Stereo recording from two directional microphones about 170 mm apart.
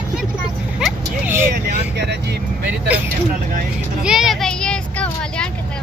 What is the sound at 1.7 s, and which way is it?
Speech, 75° right (ahead or behind).